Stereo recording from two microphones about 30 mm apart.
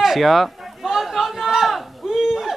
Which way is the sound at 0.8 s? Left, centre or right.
Right.